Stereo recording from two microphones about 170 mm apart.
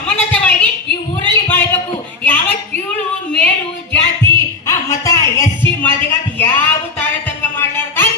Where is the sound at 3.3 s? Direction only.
10° left (ahead or behind).